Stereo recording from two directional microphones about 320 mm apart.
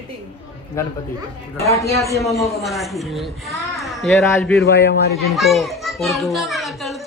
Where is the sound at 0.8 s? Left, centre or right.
Centre.